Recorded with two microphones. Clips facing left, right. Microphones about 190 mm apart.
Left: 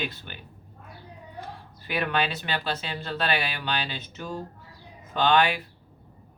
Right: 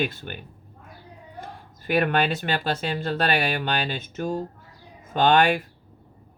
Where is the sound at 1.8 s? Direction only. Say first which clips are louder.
Right 5 dB; 50° right (ahead or behind).